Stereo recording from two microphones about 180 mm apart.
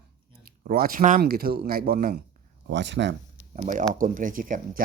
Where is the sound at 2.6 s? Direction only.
80° right.